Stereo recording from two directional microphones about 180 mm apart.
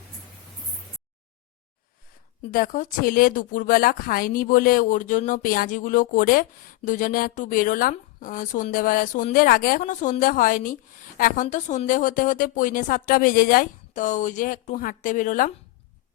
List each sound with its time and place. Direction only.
2.5 s speech: 50° left (ahead or behind)